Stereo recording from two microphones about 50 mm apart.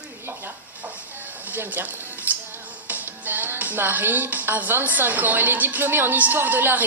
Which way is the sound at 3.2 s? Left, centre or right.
Right.